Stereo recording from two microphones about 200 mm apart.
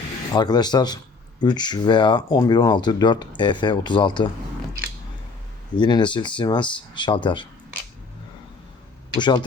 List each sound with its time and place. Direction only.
0.3 s speech: 20° left (ahead or behind)
5.7 s speech: 25° left (ahead or behind)
9.1 s speech: 20° left (ahead or behind)